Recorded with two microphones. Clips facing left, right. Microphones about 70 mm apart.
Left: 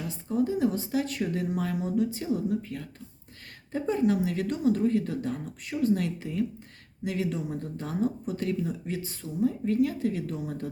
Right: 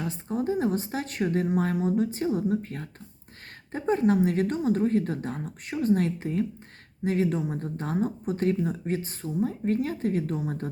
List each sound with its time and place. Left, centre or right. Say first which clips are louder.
0.0 s a woman's voice: left 1 dB; right